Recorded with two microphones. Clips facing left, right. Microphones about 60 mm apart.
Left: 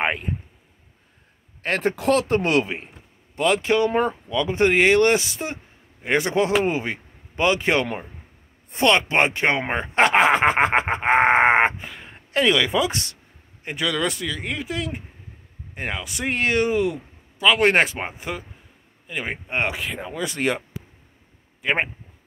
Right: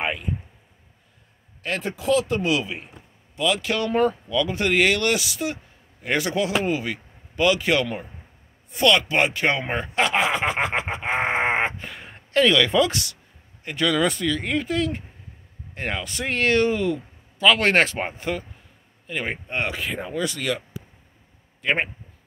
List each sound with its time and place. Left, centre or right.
0.0 s a man's voice: left
1.6 s a man's voice: left
3.6 s speech: left
9.9 s a sound: left
11.8 s a sound: centre
12.3 s speech: centre
12.9 s speech: left
13.8 s speech: centre
19.8 s speech: centre
20.2 s speech: left
21.5 s speech: centre